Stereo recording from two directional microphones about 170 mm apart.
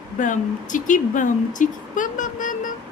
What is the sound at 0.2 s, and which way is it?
Speech, 50° left (ahead or behind).